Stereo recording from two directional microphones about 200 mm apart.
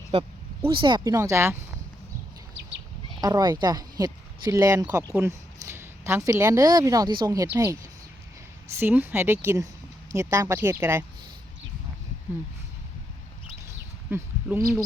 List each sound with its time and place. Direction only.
0.1 s speech: 30° right (ahead or behind); by 1.5 s 15° right (ahead or behind)
3.2 s a woman's voice: 20° right (ahead or behind)
14.1 s speech: 10° right (ahead or behind)